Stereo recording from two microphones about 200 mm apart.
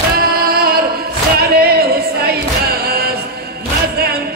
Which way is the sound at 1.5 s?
50° right (ahead or behind).